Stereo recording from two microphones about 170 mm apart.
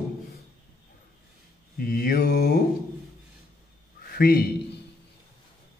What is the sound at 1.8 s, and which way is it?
Mantra, 60° left (ahead or behind).